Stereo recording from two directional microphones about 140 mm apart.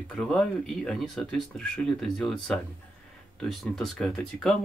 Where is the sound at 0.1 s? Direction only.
5° left (ahead or behind).